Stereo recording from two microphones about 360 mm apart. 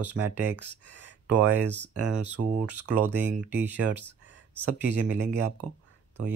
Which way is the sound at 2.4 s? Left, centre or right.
Right.